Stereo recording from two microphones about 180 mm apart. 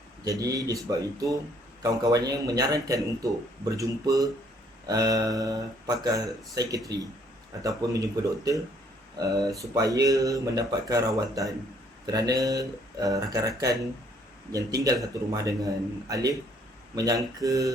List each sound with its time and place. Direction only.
0.3 s speech: 20° right (ahead or behind)
12.0 s speech: 20° right (ahead or behind)
14.5 s speech: 20° right (ahead or behind)
17.4 s a sound: 20° right (ahead or behind)